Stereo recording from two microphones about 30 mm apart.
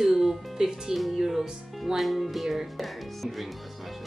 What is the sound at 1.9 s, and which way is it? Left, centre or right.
Music, centre.